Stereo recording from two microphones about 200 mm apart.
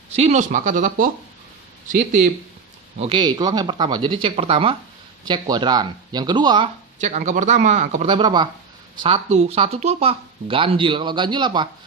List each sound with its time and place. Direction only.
0.2 s speech: 35° right (ahead or behind)
3.0 s speech: 25° right (ahead or behind)
7.0 s speech: 35° right (ahead or behind)